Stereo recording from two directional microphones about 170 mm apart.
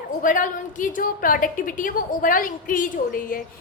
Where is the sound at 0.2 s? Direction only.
50° left (ahead or behind).